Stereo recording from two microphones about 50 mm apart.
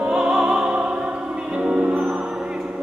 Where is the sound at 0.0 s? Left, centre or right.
Centre.